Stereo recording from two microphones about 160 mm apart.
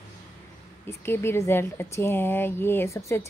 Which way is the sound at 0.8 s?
15° left (ahead or behind).